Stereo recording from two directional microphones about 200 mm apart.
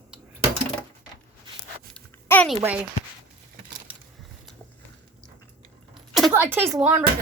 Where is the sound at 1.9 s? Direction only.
10° left (ahead or behind).